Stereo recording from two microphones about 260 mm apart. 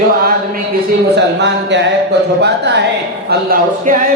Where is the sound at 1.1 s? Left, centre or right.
Right.